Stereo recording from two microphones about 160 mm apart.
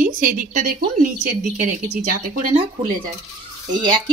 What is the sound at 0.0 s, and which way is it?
A woman's voice, 60° right (ahead or behind).